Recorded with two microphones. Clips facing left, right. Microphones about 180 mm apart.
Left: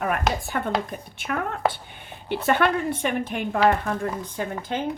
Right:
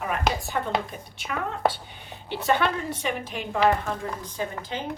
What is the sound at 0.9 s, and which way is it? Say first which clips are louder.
A woman's voice: left 4 dB; 50° left (ahead or behind).